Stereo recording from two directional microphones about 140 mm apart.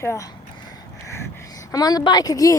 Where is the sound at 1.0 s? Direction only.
20° left (ahead or behind).